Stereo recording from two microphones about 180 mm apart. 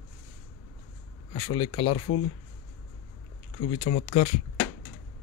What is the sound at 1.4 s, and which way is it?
Speech, 30° left (ahead or behind).